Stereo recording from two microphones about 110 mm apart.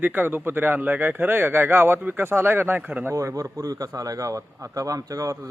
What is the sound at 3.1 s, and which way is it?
Speech, 30° right (ahead or behind).